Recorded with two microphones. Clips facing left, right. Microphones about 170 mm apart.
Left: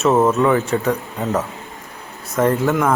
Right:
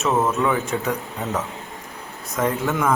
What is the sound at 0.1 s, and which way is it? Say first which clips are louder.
Speech: left 5 dB; 20° left (ahead or behind).